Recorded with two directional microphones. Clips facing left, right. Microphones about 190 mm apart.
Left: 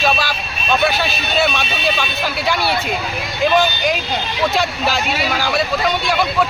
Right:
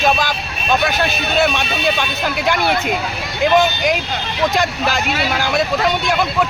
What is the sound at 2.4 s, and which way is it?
Speech, 20° right (ahead or behind).